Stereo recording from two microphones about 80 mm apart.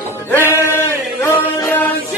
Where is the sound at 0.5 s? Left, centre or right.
Left.